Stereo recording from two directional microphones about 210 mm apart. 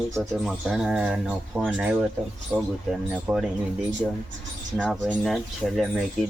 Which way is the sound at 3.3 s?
5° right (ahead or behind).